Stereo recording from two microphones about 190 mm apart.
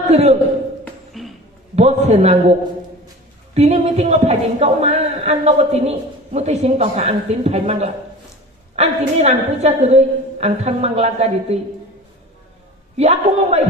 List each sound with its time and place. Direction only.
0.1 s speech: 35° right (ahead or behind)
0.9 s a sound: centre (ahead or behind)
1.7 s speech: 35° right (ahead or behind)
13.0 s speech: 35° right (ahead or behind)